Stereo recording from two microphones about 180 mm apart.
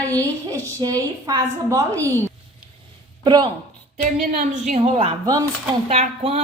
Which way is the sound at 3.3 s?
25° right (ahead or behind).